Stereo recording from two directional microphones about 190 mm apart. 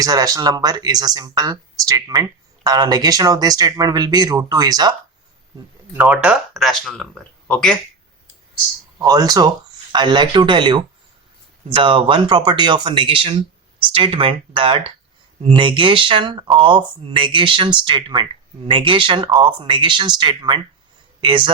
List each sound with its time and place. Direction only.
0.0 s speech: 20° right (ahead or behind)
5.9 s speech: 10° right (ahead or behind)
9.0 s speech: 20° right (ahead or behind)